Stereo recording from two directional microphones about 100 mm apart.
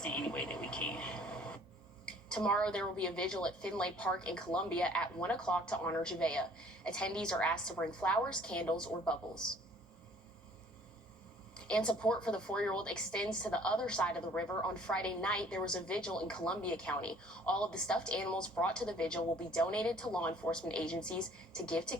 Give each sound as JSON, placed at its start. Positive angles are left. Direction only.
{"t": 0.0, "sound": "a sound", "side_deg": 10}
{"t": 2.0, "sound": "a woman's voice", "side_deg": 10}
{"t": 11.5, "sound": "a woman's voice", "side_deg": 10}